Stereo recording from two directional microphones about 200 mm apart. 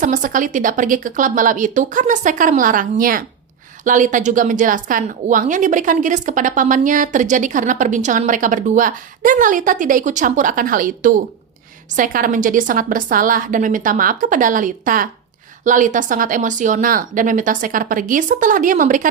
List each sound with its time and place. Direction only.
0.0 s a woman's voice: 40° right (ahead or behind)